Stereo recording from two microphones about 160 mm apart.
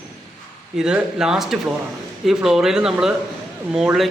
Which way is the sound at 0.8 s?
5° right (ahead or behind).